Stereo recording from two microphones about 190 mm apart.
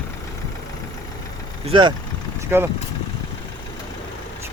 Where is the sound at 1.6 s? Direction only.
25° right (ahead or behind).